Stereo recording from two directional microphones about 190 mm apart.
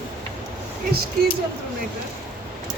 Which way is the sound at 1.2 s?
50° right (ahead or behind).